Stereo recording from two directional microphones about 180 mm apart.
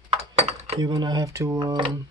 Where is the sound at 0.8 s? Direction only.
25° right (ahead or behind).